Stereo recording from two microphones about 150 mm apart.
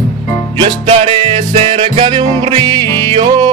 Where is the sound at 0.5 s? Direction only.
35° right (ahead or behind).